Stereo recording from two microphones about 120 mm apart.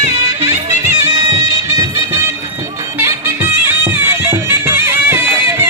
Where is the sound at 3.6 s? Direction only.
20° right (ahead or behind).